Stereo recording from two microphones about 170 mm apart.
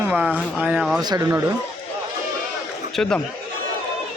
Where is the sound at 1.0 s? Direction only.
20° right (ahead or behind).